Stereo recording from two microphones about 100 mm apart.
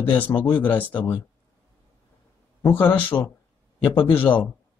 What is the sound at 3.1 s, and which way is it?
Speech, 20° left (ahead or behind).